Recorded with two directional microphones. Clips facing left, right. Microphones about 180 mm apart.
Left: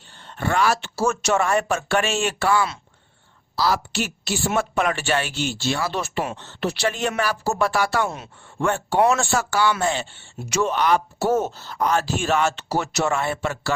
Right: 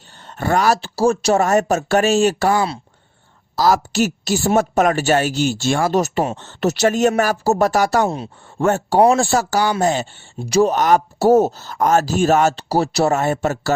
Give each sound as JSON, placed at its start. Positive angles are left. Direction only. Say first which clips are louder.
{"t": 0.3, "sound": "a woman's voice", "louder": "right 4 dB", "side_deg": -40}